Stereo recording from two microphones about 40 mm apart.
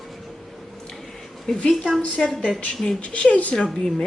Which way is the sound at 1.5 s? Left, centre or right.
Centre.